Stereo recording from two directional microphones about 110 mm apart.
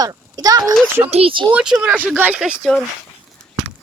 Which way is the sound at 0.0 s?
35° right (ahead or behind).